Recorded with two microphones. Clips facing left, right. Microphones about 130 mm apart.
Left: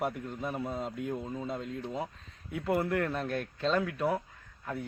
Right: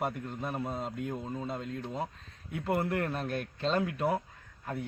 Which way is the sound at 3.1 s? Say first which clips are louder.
Left 1 dB; 15° right (ahead or behind).